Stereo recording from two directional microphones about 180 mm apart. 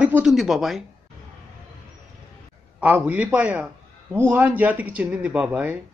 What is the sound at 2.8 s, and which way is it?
Speech, 10° right (ahead or behind).